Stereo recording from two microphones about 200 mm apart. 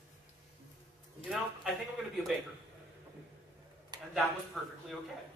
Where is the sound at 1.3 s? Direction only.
5° right (ahead or behind).